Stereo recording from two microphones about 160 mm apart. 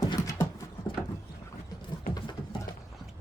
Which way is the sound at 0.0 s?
25° left (ahead or behind).